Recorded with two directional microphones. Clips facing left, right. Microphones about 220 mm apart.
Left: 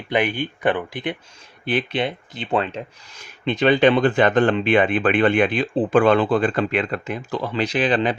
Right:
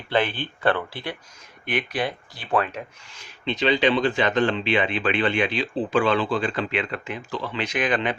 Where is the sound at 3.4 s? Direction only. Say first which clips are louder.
Left 5 dB; 50° left (ahead or behind).